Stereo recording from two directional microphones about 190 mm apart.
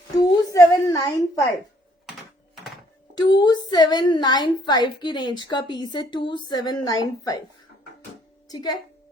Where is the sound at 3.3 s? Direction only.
20° left (ahead or behind).